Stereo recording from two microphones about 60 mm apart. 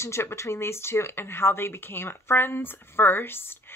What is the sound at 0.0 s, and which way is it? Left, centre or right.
Speech, left.